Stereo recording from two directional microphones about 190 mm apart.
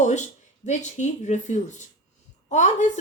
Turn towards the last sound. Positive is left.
turn(degrees=40)  # may be behind; listen again after turning